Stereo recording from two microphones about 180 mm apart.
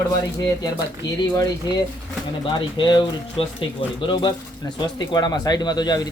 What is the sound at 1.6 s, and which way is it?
Speech, 20° left (ahead or behind).